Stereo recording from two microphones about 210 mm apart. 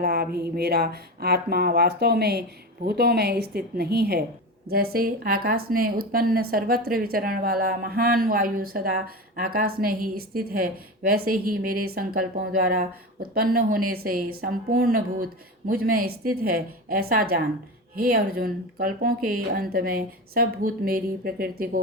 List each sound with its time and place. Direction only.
0.0 s speech: 45° right (ahead or behind)